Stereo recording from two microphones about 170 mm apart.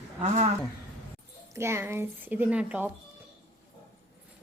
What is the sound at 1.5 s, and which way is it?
Speech, 15° right (ahead or behind).